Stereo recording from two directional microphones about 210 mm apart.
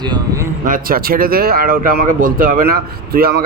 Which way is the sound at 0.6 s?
40° right (ahead or behind).